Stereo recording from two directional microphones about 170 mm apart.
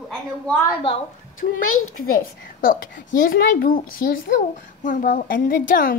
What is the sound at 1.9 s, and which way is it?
A woman's voice, 55° left (ahead or behind).